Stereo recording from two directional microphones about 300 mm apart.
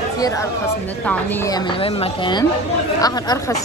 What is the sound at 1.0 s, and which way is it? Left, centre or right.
Speech, centre.